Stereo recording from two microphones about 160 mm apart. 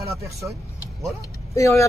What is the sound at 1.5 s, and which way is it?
Speech, 20° left (ahead or behind).